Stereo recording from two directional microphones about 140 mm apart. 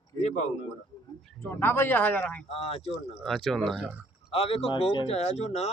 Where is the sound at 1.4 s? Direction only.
15° left (ahead or behind).